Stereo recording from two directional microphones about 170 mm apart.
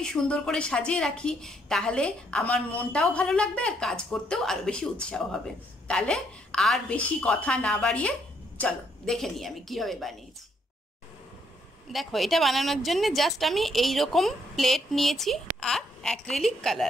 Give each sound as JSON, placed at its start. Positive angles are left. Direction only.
{"t": 0.0, "sound": "a woman's voice", "side_deg": 5}
{"t": 11.9, "sound": "a woman's voice", "side_deg": 0}